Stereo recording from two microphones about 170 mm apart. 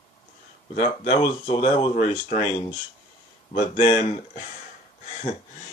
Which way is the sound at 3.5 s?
40° left (ahead or behind).